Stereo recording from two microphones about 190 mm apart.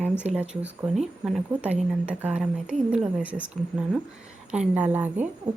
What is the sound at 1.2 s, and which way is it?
A woman's voice, 5° right (ahead or behind).